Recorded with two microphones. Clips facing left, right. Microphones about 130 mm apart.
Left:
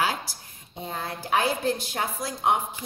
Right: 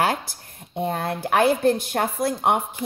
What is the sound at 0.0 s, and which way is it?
Speech, 55° right (ahead or behind).